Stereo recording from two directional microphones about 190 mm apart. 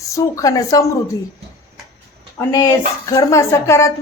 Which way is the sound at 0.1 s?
15° left (ahead or behind).